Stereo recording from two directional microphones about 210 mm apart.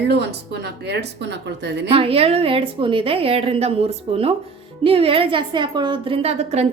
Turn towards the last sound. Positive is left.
turn(degrees=-30)  # may be behind; listen again after turning